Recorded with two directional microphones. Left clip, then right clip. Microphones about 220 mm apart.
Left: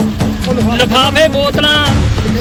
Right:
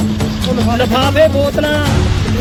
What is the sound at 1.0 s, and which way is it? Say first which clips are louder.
Speech: left 1 dB; 25° right (ahead or behind).